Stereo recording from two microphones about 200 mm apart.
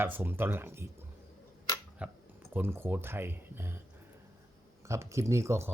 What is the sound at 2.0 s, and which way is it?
Speech, 5° right (ahead or behind).